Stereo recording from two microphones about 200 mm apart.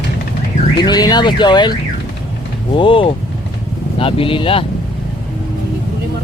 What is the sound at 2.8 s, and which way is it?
Car alarm, 25° left (ahead or behind).